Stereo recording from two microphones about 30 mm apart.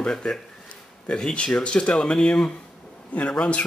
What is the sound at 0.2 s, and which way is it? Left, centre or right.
Speech, left.